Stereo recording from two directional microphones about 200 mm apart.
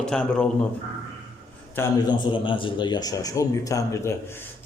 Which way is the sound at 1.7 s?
15° left (ahead or behind).